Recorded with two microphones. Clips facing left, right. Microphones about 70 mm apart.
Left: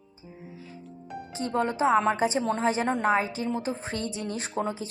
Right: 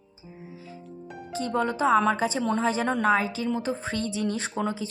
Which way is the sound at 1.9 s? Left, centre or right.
Right.